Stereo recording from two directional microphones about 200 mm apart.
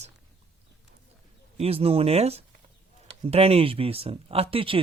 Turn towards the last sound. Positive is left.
turn(degrees=-25)  # may be behind; listen again after turning